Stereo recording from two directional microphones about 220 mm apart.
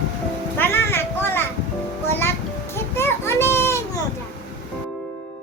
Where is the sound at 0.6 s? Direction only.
10° left (ahead or behind).